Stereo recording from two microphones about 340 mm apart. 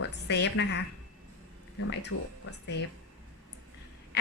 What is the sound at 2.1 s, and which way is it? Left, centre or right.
Speech, left.